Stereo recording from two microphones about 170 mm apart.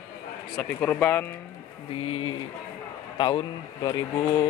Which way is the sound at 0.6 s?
10° left (ahead or behind).